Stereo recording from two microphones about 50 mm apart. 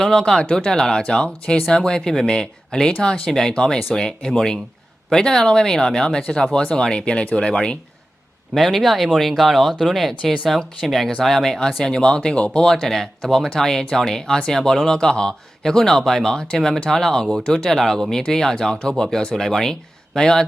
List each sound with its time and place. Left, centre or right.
0.0 s speech: centre
8.5 s speech: centre